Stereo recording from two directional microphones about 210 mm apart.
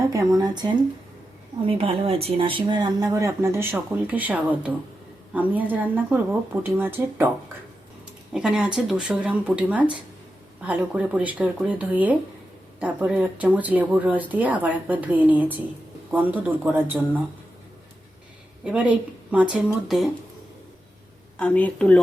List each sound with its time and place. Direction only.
0.1 s speech: 15° right (ahead or behind)
8.3 s speech: 5° right (ahead or behind)
18.6 s speech: 5° right (ahead or behind)
21.3 s speech: 5° left (ahead or behind)